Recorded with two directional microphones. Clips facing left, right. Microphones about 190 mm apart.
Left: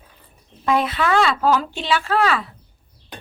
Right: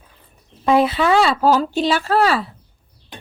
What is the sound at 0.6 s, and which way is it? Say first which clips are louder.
Speech: right 4 dB; 30° right (ahead or behind).